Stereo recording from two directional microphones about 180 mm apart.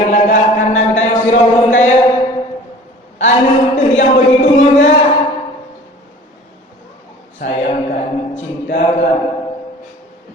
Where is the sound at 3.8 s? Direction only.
45° left (ahead or behind).